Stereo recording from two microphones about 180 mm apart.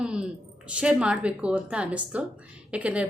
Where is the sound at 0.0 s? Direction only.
5° right (ahead or behind).